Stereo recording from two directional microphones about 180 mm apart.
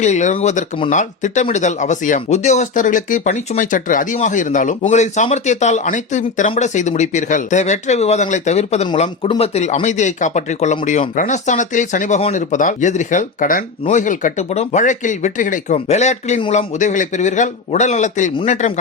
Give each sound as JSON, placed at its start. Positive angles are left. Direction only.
{"t": 0.0, "sound": "speech", "side_deg": 40}